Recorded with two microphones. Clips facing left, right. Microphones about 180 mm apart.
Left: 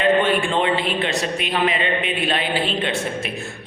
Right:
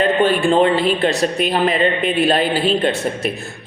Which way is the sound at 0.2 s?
35° right (ahead or behind).